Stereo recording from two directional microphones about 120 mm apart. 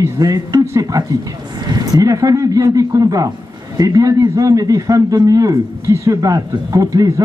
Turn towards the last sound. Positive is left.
turn(degrees=-25)  # may be behind; listen again after turning